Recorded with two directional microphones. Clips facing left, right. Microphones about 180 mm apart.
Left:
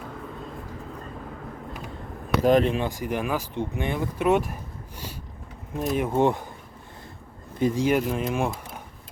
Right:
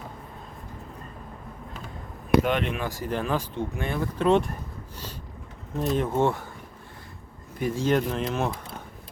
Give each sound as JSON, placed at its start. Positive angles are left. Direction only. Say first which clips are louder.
{"t": 2.4, "sound": "speech", "louder": "left 6 dB", "side_deg": 35}
{"t": 2.8, "sound": "speech", "louder": "left 1 dB", "side_deg": 15}
{"t": 5.7, "sound": "speech", "louder": "left 1 dB", "side_deg": 10}
{"t": 7.6, "sound": "speech", "louder": "left 2 dB", "side_deg": 15}